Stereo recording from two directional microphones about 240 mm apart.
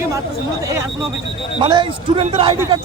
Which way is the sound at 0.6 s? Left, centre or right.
Centre.